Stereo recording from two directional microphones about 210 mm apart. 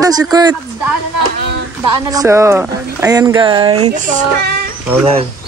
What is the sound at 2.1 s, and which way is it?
Speech, 15° right (ahead or behind).